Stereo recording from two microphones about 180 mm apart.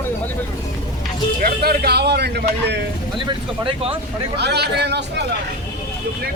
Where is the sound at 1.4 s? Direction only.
60° right (ahead or behind).